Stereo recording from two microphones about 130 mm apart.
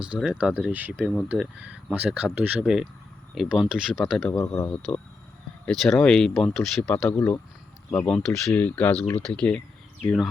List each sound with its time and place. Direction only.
0.0 s speech: 5° right (ahead or behind)
4.4 s speech: 20° left (ahead or behind)
5.6 s speech: centre (ahead or behind)
6.9 s speech: 15° left (ahead or behind)
7.9 s speech: 10° left (ahead or behind)